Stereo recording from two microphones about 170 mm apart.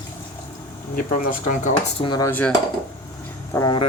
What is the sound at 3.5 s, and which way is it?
Speech, 20° left (ahead or behind).